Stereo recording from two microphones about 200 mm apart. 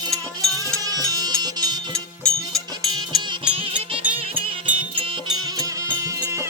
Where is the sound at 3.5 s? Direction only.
25° right (ahead or behind).